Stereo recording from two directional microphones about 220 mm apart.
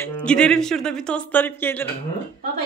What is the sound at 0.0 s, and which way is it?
Speech, 5° left (ahead or behind).